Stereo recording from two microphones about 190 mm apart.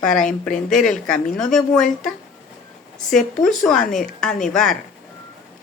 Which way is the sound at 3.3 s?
Centre (ahead or behind).